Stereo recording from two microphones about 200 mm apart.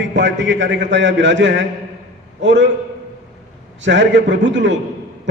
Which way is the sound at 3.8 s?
65° right (ahead or behind).